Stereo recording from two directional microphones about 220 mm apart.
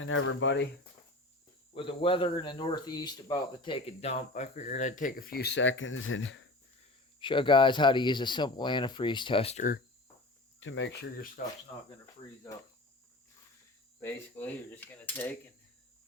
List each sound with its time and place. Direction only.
0.0 s speech: 65° left (ahead or behind)
1.7 s speech: 25° left (ahead or behind); by 6.5 s 60° left (ahead or behind)
7.2 s speech: 20° left (ahead or behind)
10.6 s speech: 60° left (ahead or behind)
11.4 s speech: 40° left (ahead or behind)
14.0 s cutlery: 10° left (ahead or behind)